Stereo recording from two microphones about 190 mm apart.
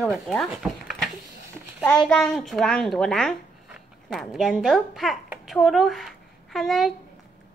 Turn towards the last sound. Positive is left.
turn(degrees=0)  # may be behind; listen again after turning